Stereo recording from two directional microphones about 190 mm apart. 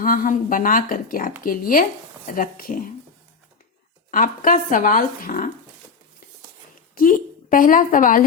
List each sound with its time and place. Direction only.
0.0 s speech: 45° left (ahead or behind)
4.1 s speech: 45° left (ahead or behind)
6.9 s a woman's voice: 45° left (ahead or behind)